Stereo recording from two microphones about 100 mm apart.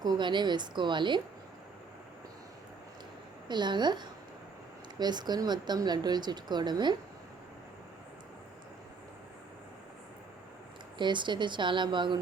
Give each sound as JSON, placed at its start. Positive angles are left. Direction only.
{"t": 0.0, "sound": "speech", "side_deg": -50}
{"t": 3.5, "sound": "speech", "side_deg": -50}
{"t": 10.9, "sound": "speech", "side_deg": -50}